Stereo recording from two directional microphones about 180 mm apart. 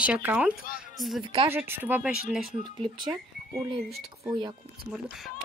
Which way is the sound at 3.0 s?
25° right (ahead or behind).